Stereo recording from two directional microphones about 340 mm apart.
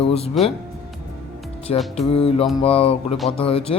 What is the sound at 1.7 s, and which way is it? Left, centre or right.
A man's voice, centre.